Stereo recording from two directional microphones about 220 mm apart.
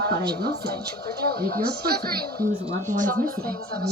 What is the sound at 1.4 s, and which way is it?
Speech, 45° right (ahead or behind).